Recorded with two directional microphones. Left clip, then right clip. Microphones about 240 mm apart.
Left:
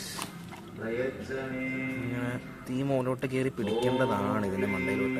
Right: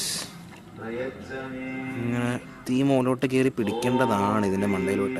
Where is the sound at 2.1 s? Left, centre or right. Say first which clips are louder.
Right 6 dB; right.